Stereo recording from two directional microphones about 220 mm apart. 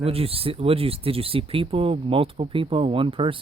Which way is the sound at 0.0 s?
25° right (ahead or behind).